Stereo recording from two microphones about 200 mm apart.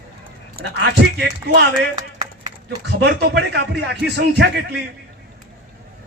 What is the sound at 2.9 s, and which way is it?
Speech, 55° right (ahead or behind).